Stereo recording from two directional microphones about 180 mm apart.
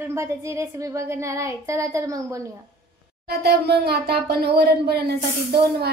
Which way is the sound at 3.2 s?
60° right (ahead or behind).